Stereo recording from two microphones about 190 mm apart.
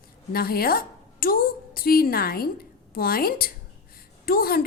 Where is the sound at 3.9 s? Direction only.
50° left (ahead or behind).